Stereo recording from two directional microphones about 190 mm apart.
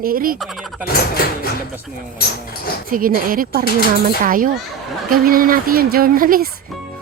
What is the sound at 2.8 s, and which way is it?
Speech, 45° right (ahead or behind).